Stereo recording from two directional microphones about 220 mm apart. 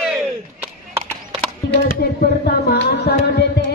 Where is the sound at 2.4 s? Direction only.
45° left (ahead or behind).